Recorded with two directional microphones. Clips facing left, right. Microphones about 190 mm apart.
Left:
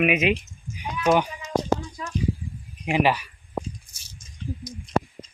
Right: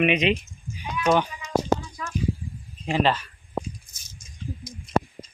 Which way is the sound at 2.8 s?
15° left (ahead or behind).